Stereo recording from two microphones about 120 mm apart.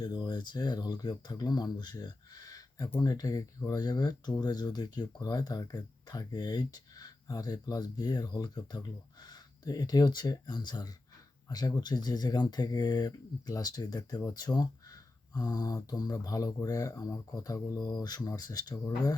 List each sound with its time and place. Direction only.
0.0 s speech: 35° left (ahead or behind)